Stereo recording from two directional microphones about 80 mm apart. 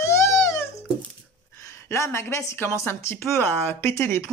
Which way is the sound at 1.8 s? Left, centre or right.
Left.